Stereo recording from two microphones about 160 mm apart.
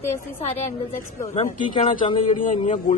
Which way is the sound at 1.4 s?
50° left (ahead or behind).